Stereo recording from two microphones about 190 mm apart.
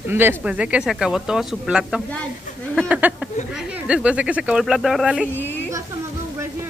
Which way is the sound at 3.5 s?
5° right (ahead or behind).